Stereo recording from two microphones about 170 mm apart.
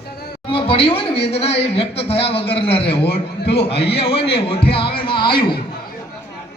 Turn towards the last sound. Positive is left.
turn(degrees=30)  # may be behind; listen again after turning